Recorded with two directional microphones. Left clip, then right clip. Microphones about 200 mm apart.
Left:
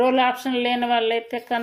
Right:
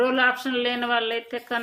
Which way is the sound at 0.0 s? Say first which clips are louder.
Left 2 dB; 15° left (ahead or behind).